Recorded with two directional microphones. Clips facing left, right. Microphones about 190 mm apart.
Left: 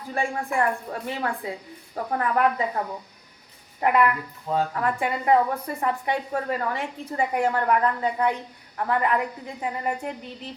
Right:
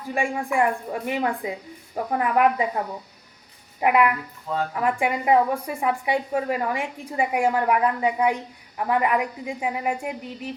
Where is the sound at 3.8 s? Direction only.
10° right (ahead or behind).